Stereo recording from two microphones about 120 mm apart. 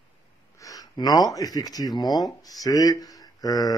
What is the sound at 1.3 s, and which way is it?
Speech, 30° left (ahead or behind).